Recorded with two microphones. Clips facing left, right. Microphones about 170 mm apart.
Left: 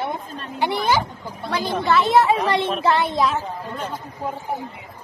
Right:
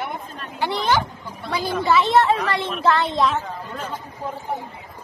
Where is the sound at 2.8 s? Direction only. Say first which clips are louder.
Right 3 dB; 15° left (ahead or behind).